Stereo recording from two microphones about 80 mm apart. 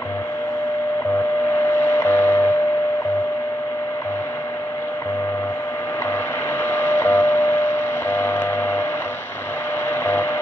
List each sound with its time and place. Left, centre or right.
1.8 s music: left
6.7 s printer: left
8.1 s a sound: left